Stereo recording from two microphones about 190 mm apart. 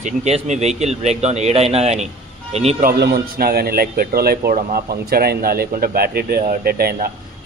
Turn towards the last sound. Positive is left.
turn(degrees=-55)  # may be behind; listen again after turning